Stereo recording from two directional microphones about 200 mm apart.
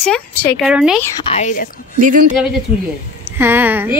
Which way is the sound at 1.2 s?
35° left (ahead or behind).